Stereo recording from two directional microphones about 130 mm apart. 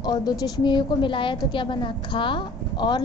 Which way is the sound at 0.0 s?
30° left (ahead or behind).